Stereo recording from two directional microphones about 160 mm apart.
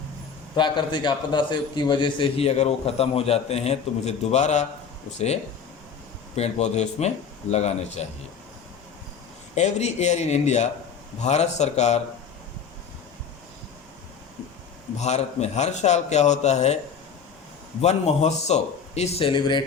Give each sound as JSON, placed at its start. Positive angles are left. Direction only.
{"t": 0.5, "sound": "a man's voice", "side_deg": 30}
{"t": 6.3, "sound": "a man's voice", "side_deg": 45}
{"t": 9.6, "sound": "a man's voice", "side_deg": 45}
{"t": 14.9, "sound": "a man's voice", "side_deg": 45}
{"t": 17.7, "sound": "a man's voice", "side_deg": 40}